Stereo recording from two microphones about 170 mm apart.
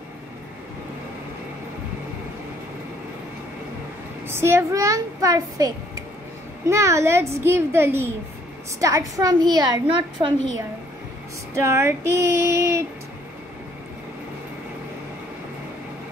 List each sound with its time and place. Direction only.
4.3 s a child's voice: 15° right (ahead or behind)
11.5 s a woman's voice: 15° right (ahead or behind)